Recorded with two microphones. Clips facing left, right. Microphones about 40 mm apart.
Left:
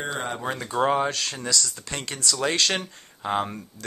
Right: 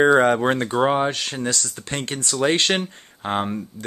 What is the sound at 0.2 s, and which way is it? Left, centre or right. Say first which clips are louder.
Speech: right 12 dB; right.